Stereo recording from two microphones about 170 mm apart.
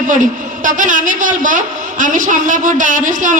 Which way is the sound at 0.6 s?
50° right (ahead or behind).